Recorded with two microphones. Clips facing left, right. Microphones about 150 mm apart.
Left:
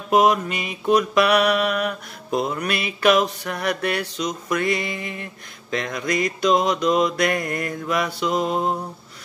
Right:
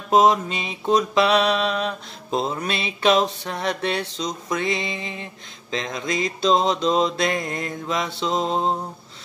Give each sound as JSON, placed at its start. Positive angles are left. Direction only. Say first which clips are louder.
{"t": 0.1, "sound": "mantra", "louder": "right 1 dB", "side_deg": -25}